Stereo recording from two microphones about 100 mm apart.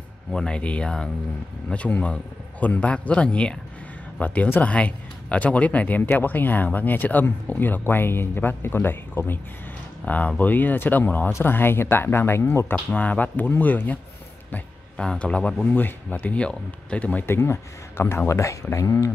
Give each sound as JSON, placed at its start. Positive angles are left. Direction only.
{"t": 0.3, "sound": "speech", "side_deg": 5}